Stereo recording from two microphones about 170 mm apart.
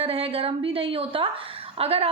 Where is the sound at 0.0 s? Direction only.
35° right (ahead or behind).